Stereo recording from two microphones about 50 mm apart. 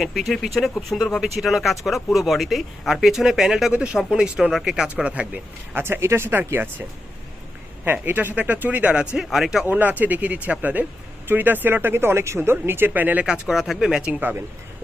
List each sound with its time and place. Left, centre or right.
0.0 s speech: centre
3.7 s speech: right
5.0 s speech: right
5.7 s speech: right
6.3 s speech: right
8.0 s speech: right
9.1 s speech: centre
9.6 s speech: right
12.4 s speech: right
12.9 s speech: right
13.2 s speech: centre
14.1 s speech: right